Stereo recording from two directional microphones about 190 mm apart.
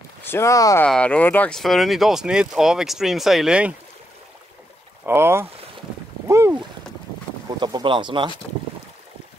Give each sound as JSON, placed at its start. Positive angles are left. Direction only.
{"t": 0.2, "sound": "speech", "side_deg": 15}
{"t": 0.8, "sound": "speech", "side_deg": 5}
{"t": 5.0, "sound": "speech", "side_deg": -15}
{"t": 6.2, "sound": "boat", "side_deg": -15}
{"t": 7.6, "sound": "speech", "side_deg": -25}